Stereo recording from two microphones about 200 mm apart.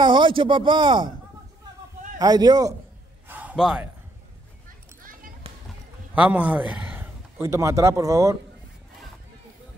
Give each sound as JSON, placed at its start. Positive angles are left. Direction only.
{"t": 0.0, "sound": "speech", "side_deg": -25}
{"t": 2.1, "sound": "speech", "side_deg": -20}
{"t": 3.3, "sound": "a sound", "side_deg": -10}
{"t": 6.1, "sound": "a man's voice", "side_deg": -5}